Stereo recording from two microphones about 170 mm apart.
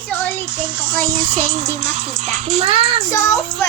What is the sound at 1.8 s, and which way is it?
Music, 40° right (ahead or behind).